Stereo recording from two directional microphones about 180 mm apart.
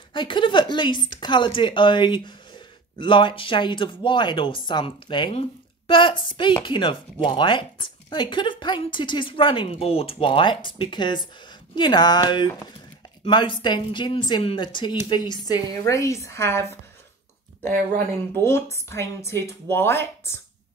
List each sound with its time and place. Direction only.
0.1 s speech: 25° left (ahead or behind)
18.4 s speech: 15° left (ahead or behind)